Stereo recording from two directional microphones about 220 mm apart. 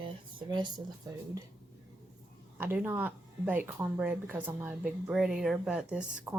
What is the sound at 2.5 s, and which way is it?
Speech, 10° right (ahead or behind).